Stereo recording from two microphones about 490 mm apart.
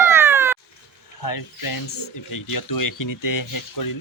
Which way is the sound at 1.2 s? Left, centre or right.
Left.